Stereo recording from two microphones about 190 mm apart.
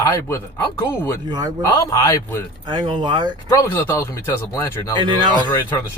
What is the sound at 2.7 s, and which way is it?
Speech, 25° right (ahead or behind).